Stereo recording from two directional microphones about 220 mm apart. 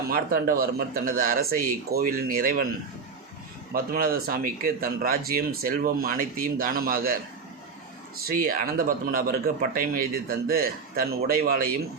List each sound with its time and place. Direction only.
0.1 s speech: 40° right (ahead or behind)
3.7 s speech: 40° right (ahead or behind)
8.3 s speech: 40° right (ahead or behind)